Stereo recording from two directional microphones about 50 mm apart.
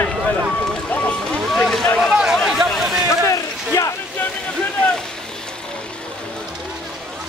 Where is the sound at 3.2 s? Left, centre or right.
Left.